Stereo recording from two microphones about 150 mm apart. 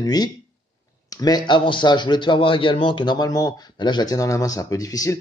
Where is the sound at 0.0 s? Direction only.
25° left (ahead or behind).